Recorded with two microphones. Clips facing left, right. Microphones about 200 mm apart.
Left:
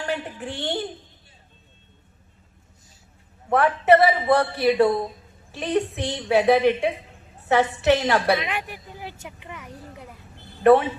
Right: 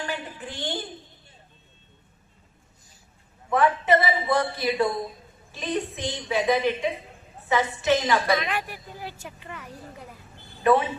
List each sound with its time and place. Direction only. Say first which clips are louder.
0.3 s a woman's voice: left 4 dB; 70° left (ahead or behind)
3.5 s a woman's voice: left 4 dB; 65° left (ahead or behind)
8.4 s speech: even; 15° left (ahead or behind)
10.6 s a woman's voice: left 5 dB; 65° left (ahead or behind)